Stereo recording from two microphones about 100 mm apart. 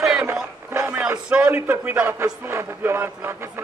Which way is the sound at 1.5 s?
20° right (ahead or behind).